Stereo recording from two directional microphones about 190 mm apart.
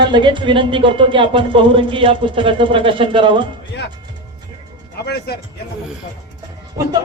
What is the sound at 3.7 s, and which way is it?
Music, 60° left (ahead or behind).